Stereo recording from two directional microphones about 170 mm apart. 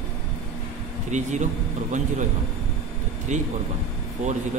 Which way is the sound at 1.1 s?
45° right (ahead or behind).